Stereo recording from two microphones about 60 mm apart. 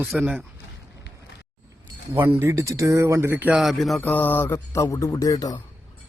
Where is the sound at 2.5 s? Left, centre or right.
Right.